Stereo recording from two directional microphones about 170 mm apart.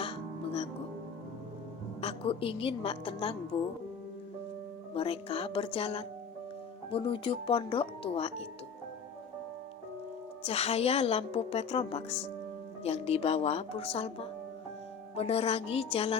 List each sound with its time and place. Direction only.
0.0 s music: 35° left (ahead or behind)
2.0 s a woman's voice: 35° left (ahead or behind)
4.9 s a woman's voice: 35° left (ahead or behind)
10.4 s a woman's voice: 40° left (ahead or behind)